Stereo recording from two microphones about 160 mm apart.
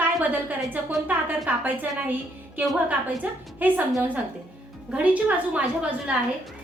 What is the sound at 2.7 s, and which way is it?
A woman's voice, 10° right (ahead or behind).